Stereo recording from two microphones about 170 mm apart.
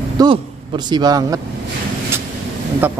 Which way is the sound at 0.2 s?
25° right (ahead or behind).